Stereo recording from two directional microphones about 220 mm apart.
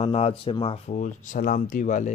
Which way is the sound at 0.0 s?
25° left (ahead or behind).